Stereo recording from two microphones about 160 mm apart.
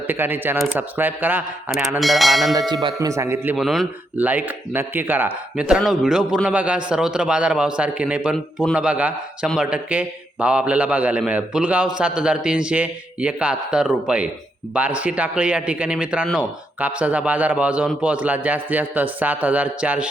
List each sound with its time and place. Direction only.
0.1 s speech: 15° right (ahead or behind)
2.0 s speech: centre (ahead or behind)
2.8 s speech: 20° right (ahead or behind)
3.6 s speech: centre (ahead or behind)